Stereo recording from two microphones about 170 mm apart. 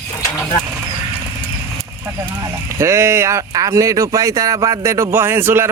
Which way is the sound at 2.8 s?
15° right (ahead or behind).